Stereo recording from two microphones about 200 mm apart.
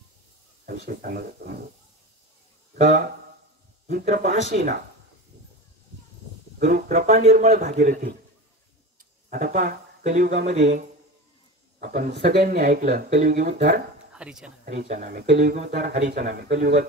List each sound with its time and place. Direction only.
0.7 s speech: 45° right (ahead or behind)
2.7 s a man's voice: 45° right (ahead or behind)
6.6 s a man's voice: 40° right (ahead or behind)
9.3 s a man's voice: 40° right (ahead or behind)
11.8 s speech: 50° right (ahead or behind)
12.5 s a man's voice: 40° right (ahead or behind)
14.1 s speech: 5° right (ahead or behind)
14.9 s speech: 40° right (ahead or behind)